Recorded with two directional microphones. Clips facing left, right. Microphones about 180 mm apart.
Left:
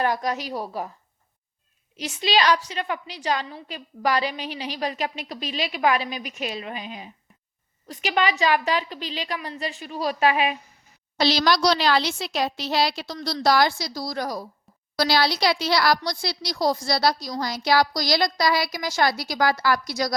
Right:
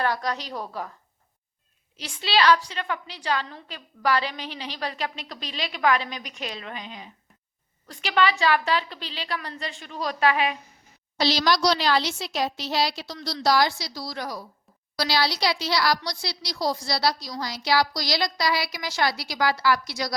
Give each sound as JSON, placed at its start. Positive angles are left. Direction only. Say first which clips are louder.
{"t": 0.0, "sound": "a woman's voice", "louder": "left 2 dB", "side_deg": 15}
{"t": 2.1, "sound": "a woman's voice", "louder": "even", "side_deg": 15}
{"t": 11.2, "sound": "a woman's voice", "louder": "left 2 dB", "side_deg": 55}